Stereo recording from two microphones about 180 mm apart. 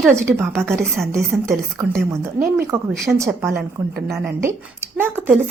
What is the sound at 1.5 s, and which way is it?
A woman's voice, 15° right (ahead or behind).